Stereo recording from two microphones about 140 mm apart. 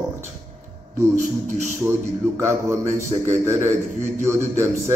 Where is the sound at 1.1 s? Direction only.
65° right (ahead or behind).